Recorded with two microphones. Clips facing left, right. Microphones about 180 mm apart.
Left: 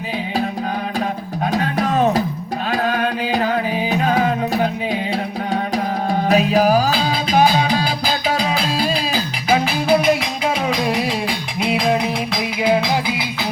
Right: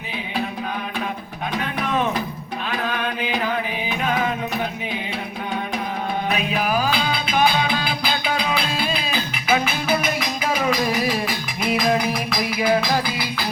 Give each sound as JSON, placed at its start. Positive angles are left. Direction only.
{"t": 1.5, "sound": "music", "side_deg": 40}
{"t": 6.2, "sound": "music", "side_deg": 35}